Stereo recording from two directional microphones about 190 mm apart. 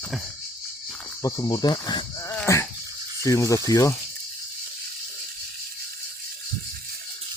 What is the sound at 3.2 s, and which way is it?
Speech, 15° left (ahead or behind).